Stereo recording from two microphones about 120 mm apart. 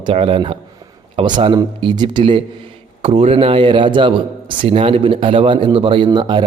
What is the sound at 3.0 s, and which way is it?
A man's voice, 55° right (ahead or behind).